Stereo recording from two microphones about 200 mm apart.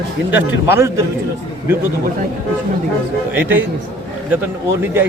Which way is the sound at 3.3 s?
10° right (ahead or behind).